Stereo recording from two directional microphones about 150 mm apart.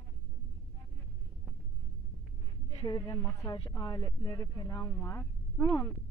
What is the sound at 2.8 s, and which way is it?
Speech, 25° left (ahead or behind).